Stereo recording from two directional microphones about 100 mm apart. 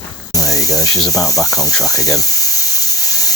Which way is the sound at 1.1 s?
35° left (ahead or behind).